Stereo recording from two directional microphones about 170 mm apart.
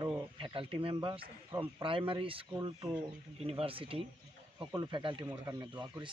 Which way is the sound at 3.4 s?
35° right (ahead or behind).